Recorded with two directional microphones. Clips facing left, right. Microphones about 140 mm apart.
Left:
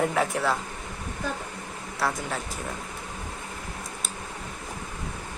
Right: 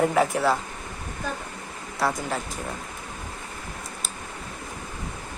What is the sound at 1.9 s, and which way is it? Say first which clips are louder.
Speech: right 3 dB; centre (ahead or behind).